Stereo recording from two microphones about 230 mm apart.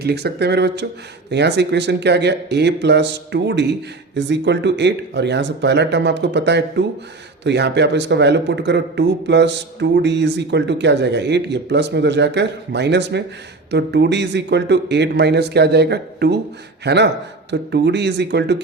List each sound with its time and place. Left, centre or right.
0.0 s a man's voice: right